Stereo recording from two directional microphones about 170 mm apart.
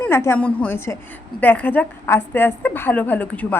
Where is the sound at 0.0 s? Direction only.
15° left (ahead or behind).